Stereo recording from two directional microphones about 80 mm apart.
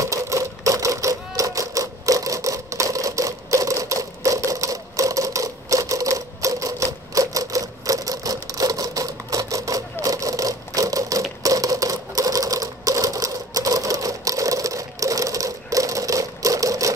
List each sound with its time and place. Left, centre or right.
0.0 s sewing machine: right